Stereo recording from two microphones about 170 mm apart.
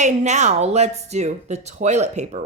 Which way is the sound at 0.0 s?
45° right (ahead or behind).